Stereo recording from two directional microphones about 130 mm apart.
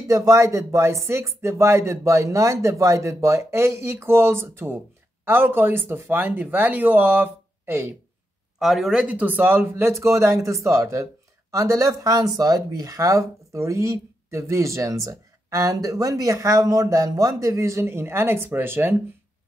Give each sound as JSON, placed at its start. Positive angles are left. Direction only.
{"t": 0.1, "sound": "speech", "side_deg": -25}
{"t": 8.5, "sound": "speech", "side_deg": 0}